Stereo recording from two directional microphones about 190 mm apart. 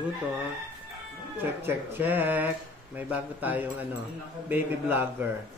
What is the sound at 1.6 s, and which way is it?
Speech, 10° right (ahead or behind).